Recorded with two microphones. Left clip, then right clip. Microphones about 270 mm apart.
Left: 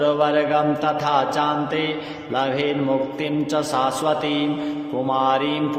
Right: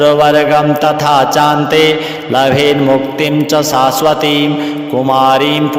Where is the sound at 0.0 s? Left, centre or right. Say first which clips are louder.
Right 11 dB; right.